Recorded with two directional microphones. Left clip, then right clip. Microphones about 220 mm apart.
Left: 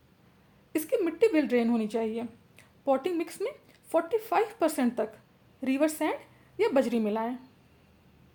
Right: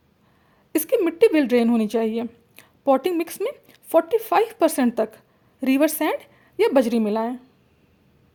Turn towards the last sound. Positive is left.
turn(degrees=-35)  # may be behind; listen again after turning